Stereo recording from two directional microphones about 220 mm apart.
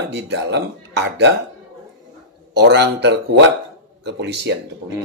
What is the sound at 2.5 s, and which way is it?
Speech, 50° right (ahead or behind).